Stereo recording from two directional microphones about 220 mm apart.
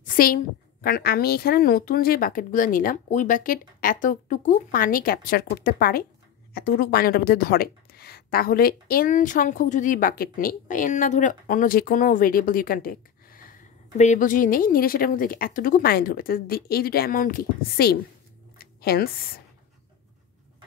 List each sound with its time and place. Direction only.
0.8 s a woman's voice: 45° left (ahead or behind)